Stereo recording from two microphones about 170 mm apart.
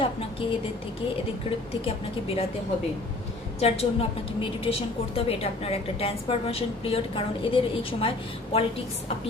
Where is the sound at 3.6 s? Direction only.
35° left (ahead or behind).